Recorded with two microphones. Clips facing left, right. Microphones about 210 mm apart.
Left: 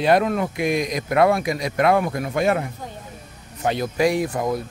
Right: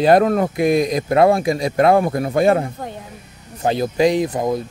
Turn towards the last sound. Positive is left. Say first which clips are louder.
# right 3 dB
turn(degrees=-20)  # may be behind; listen again after turning